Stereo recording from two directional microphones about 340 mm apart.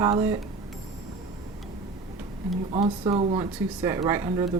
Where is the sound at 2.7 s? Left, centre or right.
Centre.